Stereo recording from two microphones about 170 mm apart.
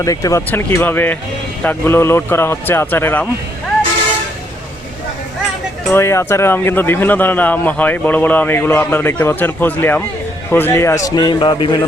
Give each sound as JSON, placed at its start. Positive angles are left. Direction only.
{"t": 0.0, "sound": "a man's voice", "side_deg": 20}
{"t": 5.9, "sound": "a man's voice", "side_deg": 15}